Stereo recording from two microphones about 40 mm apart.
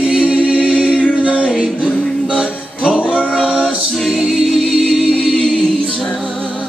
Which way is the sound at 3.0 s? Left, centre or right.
Left.